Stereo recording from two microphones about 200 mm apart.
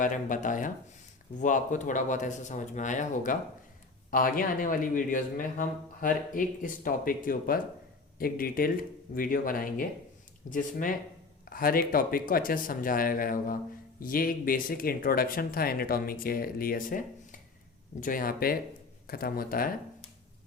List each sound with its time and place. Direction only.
0.0 s speech: 40° left (ahead or behind)